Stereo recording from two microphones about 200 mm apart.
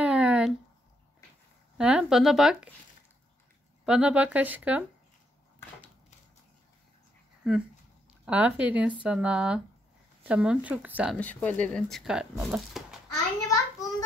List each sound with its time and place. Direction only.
0.0 s a sound: 5° right (ahead or behind)
1.8 s speech: 5° right (ahead or behind)
3.8 s speech: 5° right (ahead or behind)
7.4 s speech: 5° right (ahead or behind)
11.1 s speech: 10° left (ahead or behind)
13.5 s a sound: 15° left (ahead or behind)